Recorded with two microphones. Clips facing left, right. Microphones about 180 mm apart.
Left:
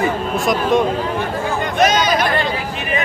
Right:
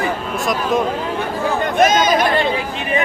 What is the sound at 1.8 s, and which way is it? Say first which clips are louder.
Chatter: right 1 dB; 50° right (ahead or behind).